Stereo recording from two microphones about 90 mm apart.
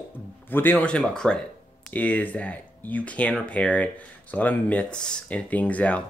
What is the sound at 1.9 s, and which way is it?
Speech, 20° left (ahead or behind).